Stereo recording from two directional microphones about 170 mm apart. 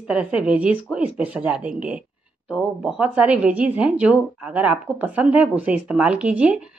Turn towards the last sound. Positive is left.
turn(degrees=-5)  # may be behind; listen again after turning